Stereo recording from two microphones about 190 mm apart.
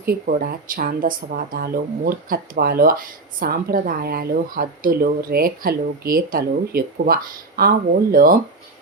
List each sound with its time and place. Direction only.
0.0 s speech: 50° right (ahead or behind)